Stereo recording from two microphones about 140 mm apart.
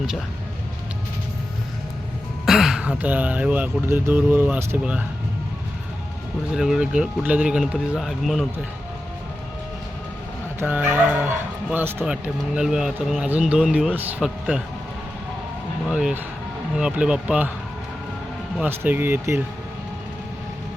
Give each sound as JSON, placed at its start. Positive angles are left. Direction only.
{"t": 2.5, "sound": "speech", "side_deg": -5}
{"t": 6.5, "sound": "speech", "side_deg": -5}
{"t": 10.6, "sound": "speech", "side_deg": -15}
{"t": 15.9, "sound": "speech", "side_deg": -5}
{"t": 18.6, "sound": "speech", "side_deg": -15}